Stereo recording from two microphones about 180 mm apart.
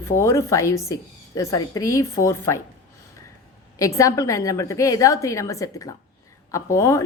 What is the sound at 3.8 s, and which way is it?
A woman's voice, 15° left (ahead or behind).